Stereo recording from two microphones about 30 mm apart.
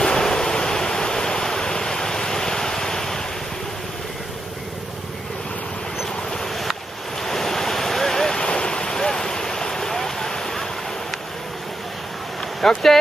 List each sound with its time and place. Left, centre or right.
0.0 s waves: left
7.2 s waves: centre
8.5 s waves: left
12.5 s speech: centre